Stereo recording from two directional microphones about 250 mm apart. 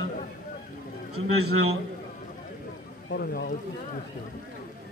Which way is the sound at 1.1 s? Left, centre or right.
Right.